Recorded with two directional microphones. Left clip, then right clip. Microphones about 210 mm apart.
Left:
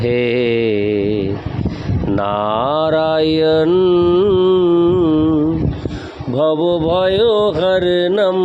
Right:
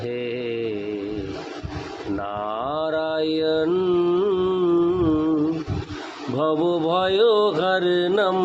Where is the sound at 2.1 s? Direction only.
45° left (ahead or behind).